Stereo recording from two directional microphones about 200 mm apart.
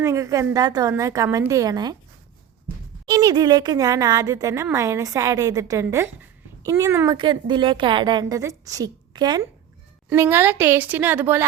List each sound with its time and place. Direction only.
0.0 s a woman's voice: 15° right (ahead or behind)
3.1 s a woman's voice: 20° right (ahead or behind)